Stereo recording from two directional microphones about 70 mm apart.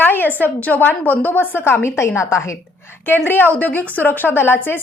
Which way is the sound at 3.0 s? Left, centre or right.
Left.